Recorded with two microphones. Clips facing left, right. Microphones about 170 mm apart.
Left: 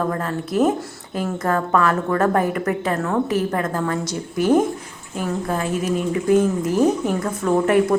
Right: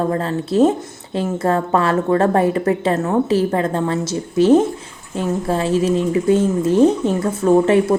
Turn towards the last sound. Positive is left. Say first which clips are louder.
# right 3 dB
turn(degrees=-25)  # may be behind; listen again after turning